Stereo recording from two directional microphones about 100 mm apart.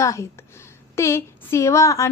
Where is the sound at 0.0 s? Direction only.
30° left (ahead or behind).